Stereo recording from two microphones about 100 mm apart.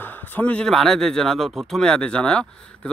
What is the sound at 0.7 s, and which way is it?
Speech, 5° left (ahead or behind).